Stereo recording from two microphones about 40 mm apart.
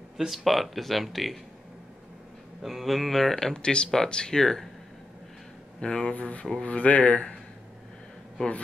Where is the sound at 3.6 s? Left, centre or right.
Left.